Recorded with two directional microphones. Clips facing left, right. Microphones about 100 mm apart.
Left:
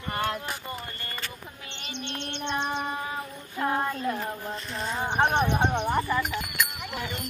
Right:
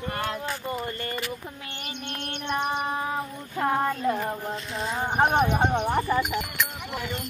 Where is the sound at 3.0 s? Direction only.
35° right (ahead or behind).